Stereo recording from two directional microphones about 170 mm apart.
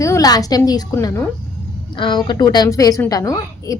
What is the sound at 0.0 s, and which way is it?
A woman's voice, 20° left (ahead or behind).